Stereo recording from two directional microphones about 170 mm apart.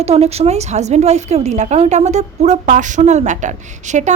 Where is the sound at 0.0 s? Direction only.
40° right (ahead or behind).